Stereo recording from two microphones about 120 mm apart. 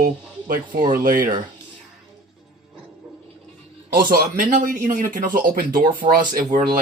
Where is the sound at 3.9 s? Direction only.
90° right.